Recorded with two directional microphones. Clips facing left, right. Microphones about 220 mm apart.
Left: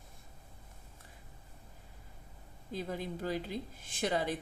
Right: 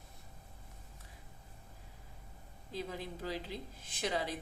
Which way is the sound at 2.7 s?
50° left (ahead or behind).